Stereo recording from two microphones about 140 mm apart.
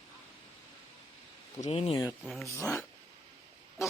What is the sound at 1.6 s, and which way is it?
Speech, 45° left (ahead or behind).